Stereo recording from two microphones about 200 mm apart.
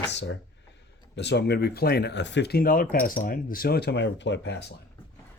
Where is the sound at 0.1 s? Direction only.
60° left (ahead or behind).